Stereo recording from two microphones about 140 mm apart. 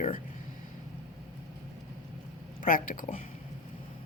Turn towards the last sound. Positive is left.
turn(degrees=70)  # may be behind; listen again after turning